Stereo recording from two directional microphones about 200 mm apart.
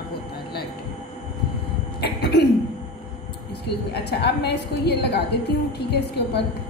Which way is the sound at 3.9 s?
55° left (ahead or behind).